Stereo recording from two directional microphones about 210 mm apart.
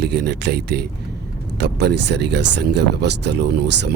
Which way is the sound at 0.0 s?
50° right (ahead or behind).